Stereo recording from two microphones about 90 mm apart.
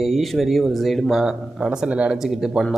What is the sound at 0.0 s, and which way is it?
Speech, centre (ahead or behind).